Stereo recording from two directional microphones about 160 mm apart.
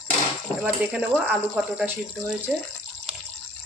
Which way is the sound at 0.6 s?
5° right (ahead or behind).